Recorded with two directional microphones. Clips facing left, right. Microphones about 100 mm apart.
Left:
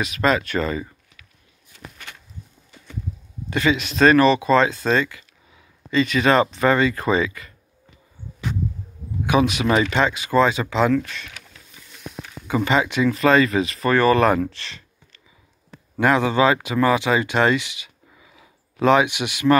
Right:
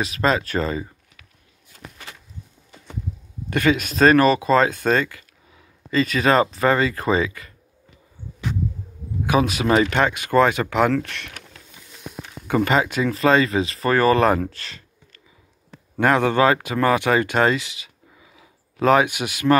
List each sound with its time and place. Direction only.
0.0 s speech: 35° right (ahead or behind)
1.7 s a sound: 40° right (ahead or behind)
3.4 s speech: 50° right (ahead or behind); by 7.5 s 35° right (ahead or behind)
9.2 s speech: 35° right (ahead or behind); by 11.4 s 65° right (ahead or behind)
12.4 s speech: 50° right (ahead or behind)
14.4 s a sound: 40° right (ahead or behind)
16.0 s speech: 50° right (ahead or behind); by 18.9 s 30° right (ahead or behind)
18.9 s speech: 40° right (ahead or behind)